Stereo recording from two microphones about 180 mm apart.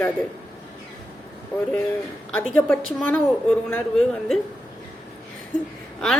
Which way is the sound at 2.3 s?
10° left (ahead or behind).